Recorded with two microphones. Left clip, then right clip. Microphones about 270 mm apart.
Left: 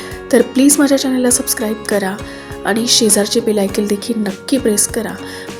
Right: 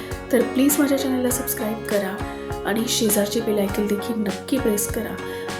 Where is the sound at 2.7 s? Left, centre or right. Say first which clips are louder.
Left 9 dB; right.